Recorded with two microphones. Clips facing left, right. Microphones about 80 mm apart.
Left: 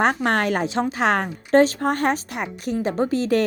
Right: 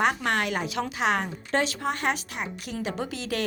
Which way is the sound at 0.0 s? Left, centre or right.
Left.